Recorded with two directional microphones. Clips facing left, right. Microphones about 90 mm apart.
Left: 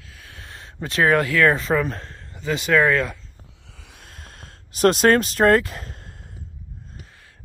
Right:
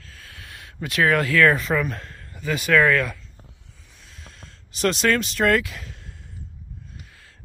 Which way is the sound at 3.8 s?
65° left (ahead or behind).